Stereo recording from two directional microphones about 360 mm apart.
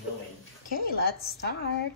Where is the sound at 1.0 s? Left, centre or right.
Left.